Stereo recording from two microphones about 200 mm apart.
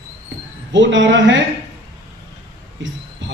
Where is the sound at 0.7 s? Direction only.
65° right (ahead or behind).